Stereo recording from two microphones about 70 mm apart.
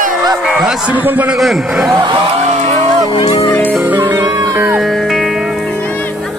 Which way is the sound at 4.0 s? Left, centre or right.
Right.